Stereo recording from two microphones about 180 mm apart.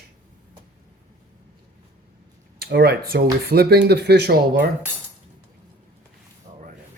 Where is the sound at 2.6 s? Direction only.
65° right (ahead or behind).